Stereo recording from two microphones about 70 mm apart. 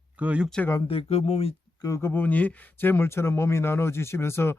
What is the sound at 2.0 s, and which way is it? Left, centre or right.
Speech, left.